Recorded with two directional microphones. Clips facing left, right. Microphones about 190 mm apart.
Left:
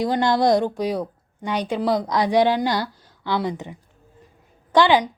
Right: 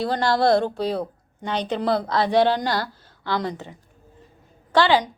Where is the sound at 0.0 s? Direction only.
15° left (ahead or behind).